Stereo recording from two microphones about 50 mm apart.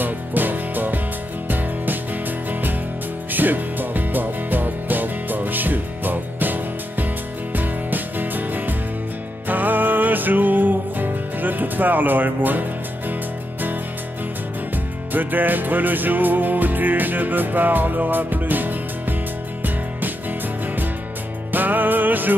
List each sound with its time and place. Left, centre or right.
0.0 s music: right
3.3 s music: right
15.1 s music: right
21.5 s music: right